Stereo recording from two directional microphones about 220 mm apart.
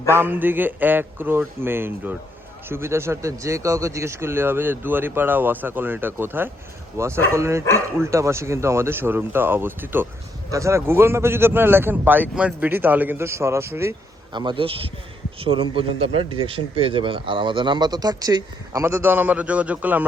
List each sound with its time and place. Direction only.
0.1 s speech: 10° right (ahead or behind)
14.3 s speech: 20° right (ahead or behind)